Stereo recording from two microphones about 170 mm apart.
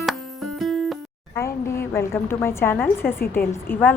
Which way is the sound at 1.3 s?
15° left (ahead or behind).